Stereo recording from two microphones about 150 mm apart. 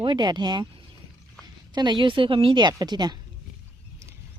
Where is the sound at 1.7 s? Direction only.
30° right (ahead or behind).